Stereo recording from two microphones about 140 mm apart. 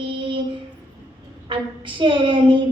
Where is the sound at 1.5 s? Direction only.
35° right (ahead or behind).